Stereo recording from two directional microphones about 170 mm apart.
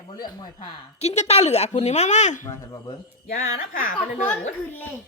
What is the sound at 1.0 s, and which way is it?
A woman's voice, 40° left (ahead or behind).